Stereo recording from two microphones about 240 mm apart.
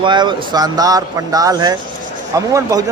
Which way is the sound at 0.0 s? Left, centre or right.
Centre.